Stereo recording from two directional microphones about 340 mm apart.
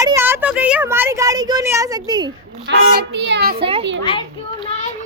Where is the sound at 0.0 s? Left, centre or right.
Centre.